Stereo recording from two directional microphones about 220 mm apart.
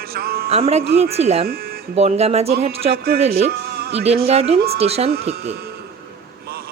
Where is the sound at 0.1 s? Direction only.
45° right (ahead or behind).